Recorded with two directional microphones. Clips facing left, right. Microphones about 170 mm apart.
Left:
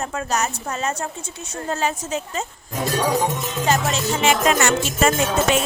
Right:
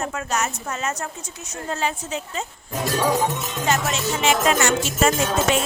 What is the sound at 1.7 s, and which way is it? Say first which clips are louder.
Speech: left 2 dB; 45° left (ahead or behind).